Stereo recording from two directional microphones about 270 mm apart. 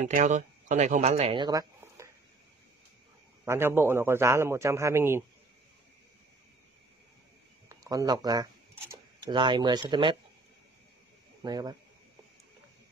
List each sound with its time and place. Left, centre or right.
0.0 s speech: right
3.4 s a man's voice: centre
7.8 s a man's voice: centre
11.4 s a man's voice: centre